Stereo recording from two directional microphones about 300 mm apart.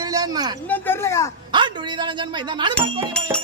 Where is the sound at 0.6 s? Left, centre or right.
Centre.